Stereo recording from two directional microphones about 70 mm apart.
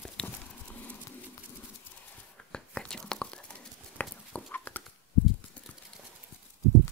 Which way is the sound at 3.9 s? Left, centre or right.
Left.